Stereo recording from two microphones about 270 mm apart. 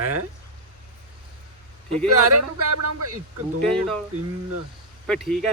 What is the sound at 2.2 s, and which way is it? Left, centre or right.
Speech, right.